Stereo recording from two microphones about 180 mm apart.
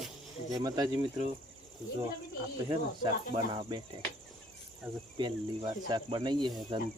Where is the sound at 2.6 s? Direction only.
25° right (ahead or behind).